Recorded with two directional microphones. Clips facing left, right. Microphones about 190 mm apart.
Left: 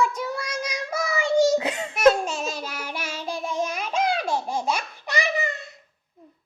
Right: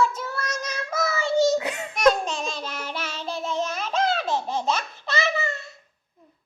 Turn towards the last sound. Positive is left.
turn(degrees=15)  # may be behind; listen again after turning